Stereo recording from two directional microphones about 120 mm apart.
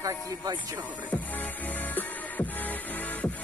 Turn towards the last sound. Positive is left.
turn(degrees=15)  # may be behind; listen again after turning